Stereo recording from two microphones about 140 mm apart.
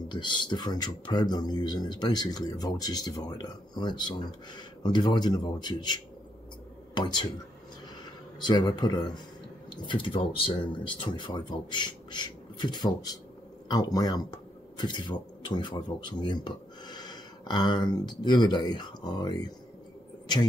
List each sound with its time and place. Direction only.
0.1 s speech: 35° left (ahead or behind)
8.4 s speech: 30° left (ahead or behind)